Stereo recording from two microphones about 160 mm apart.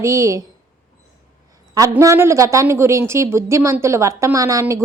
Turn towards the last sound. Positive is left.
turn(degrees=-20)  # may be behind; listen again after turning